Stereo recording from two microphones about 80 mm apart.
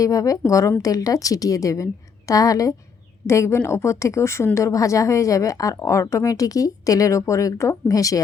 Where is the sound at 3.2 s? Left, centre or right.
Left.